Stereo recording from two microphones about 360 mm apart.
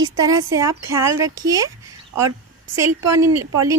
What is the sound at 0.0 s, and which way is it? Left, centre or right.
Speech, centre.